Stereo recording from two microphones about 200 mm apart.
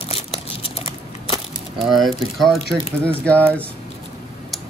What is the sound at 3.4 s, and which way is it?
Speech, 10° right (ahead or behind).